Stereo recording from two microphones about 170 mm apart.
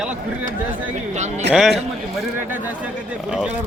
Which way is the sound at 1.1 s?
45° right (ahead or behind).